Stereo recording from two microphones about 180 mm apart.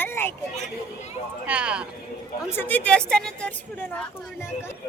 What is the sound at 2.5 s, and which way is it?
A woman's voice, 10° left (ahead or behind).